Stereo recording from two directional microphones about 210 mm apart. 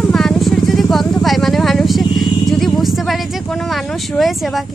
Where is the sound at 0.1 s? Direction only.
Centre (ahead or behind).